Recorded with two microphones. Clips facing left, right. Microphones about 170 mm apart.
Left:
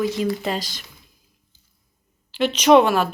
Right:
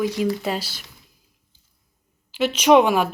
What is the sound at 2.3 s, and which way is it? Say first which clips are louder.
Speech: left 1 dB; 10° right (ahead or behind).